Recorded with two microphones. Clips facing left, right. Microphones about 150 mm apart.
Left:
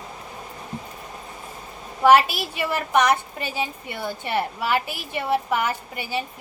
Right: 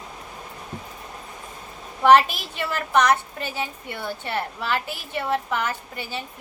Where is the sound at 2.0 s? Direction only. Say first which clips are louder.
Even; 5° left (ahead or behind).